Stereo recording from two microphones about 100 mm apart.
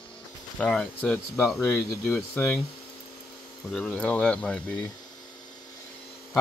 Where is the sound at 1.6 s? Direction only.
30° left (ahead or behind).